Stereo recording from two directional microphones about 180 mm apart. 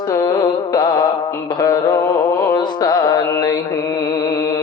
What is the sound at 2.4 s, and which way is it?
Music, 20° left (ahead or behind).